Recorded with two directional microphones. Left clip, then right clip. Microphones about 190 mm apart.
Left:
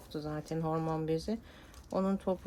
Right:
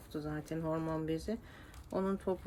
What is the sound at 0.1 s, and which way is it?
Speech, 30° left (ahead or behind).